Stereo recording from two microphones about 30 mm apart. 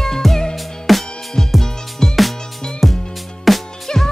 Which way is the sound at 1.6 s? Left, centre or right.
Centre.